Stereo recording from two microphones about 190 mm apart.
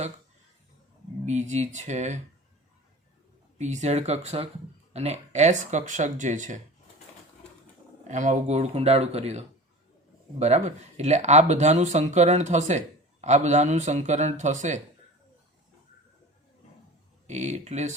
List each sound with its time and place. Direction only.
1.2 s speech: 35° right (ahead or behind)
3.6 s speech: 40° right (ahead or behind)
8.0 s speech: 40° right (ahead or behind)
10.4 s speech: 35° right (ahead or behind)
17.2 s speech: 35° right (ahead or behind)